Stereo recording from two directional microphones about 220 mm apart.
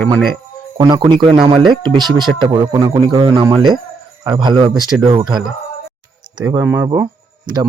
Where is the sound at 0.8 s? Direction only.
20° right (ahead or behind).